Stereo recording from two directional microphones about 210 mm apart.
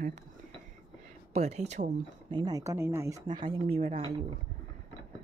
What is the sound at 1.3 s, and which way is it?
Speech, 30° right (ahead or behind).